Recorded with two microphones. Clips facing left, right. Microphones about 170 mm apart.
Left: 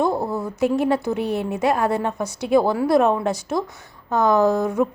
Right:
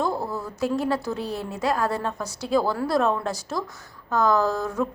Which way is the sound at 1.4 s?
20° left (ahead or behind).